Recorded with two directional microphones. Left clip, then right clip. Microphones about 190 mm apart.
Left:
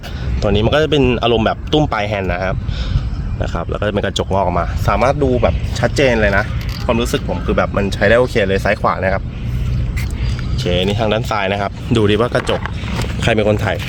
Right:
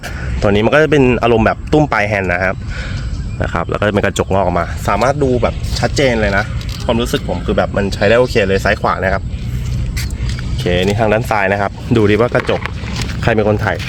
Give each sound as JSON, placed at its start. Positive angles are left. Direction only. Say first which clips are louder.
{"t": 0.5, "sound": "speech", "louder": "right 3 dB", "side_deg": -20}
{"t": 1.7, "sound": "speech", "louder": "right 4 dB", "side_deg": -25}
{"t": 3.4, "sound": "speech", "louder": "right 4 dB", "side_deg": -35}
{"t": 7.3, "sound": "speech", "louder": "right 1 dB", "side_deg": -25}
{"t": 8.3, "sound": "speech", "louder": "right 2 dB", "side_deg": -45}
{"t": 10.6, "sound": "speech", "louder": "right 3 dB", "side_deg": -25}
{"t": 13.2, "sound": "speech", "louder": "right 1 dB", "side_deg": -10}